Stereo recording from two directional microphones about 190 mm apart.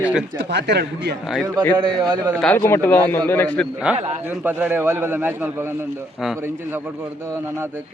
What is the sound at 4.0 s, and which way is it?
Speech, 35° right (ahead or behind).